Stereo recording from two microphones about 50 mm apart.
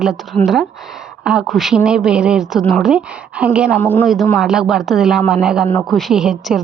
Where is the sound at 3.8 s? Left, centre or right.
Left.